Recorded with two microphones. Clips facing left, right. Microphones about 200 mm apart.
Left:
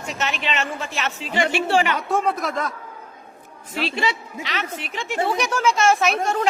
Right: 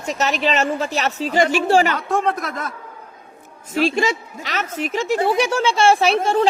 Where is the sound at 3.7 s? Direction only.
45° right (ahead or behind).